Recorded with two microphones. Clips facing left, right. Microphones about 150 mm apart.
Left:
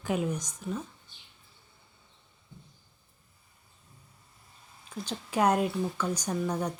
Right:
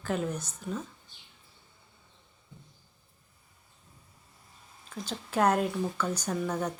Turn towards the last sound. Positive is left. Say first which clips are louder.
# even
turn(degrees=10)  # may be behind; listen again after turning